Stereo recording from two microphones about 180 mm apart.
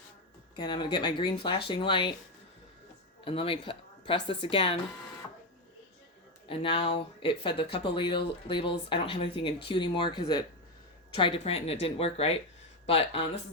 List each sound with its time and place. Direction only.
0.5 s speech: 25° left (ahead or behind)
3.2 s speech: 30° left (ahead or behind)
6.5 s speech: 30° left (ahead or behind)